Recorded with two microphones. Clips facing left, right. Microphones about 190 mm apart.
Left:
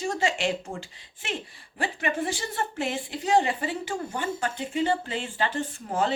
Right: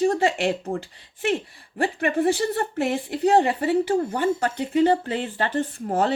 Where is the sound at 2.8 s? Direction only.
60° right (ahead or behind).